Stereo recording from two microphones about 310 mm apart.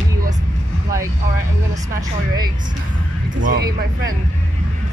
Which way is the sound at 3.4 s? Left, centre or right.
Right.